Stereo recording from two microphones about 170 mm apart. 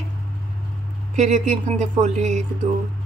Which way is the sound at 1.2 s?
45° right (ahead or behind).